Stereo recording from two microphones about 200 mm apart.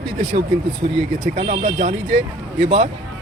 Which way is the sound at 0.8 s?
40° right (ahead or behind).